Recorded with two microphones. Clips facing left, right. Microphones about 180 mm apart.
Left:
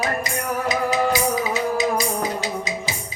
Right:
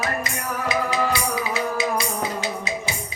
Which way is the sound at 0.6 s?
40° left (ahead or behind).